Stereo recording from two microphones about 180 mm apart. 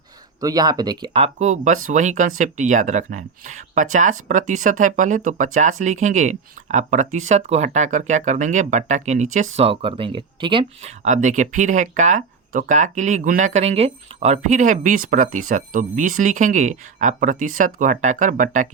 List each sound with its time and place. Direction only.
0.3 s speech: 20° right (ahead or behind)
11.0 s speech: 45° right (ahead or behind)